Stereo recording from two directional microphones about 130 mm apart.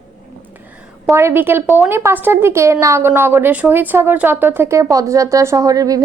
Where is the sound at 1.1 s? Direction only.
15° right (ahead or behind).